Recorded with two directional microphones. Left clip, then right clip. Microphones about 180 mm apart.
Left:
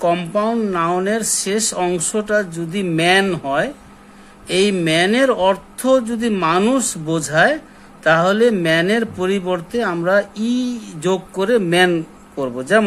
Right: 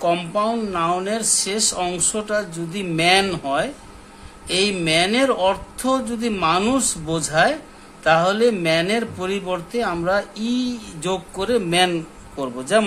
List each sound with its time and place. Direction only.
0.0 s speech: 50° left (ahead or behind)